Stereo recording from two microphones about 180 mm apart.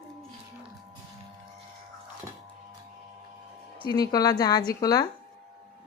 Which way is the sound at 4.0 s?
20° left (ahead or behind).